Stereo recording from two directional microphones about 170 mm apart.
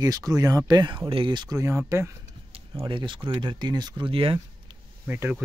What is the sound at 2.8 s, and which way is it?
Speech, 30° right (ahead or behind).